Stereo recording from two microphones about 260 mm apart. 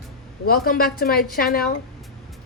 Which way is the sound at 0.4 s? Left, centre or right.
Left.